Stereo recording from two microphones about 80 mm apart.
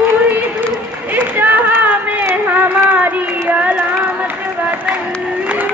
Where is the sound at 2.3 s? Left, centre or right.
Right.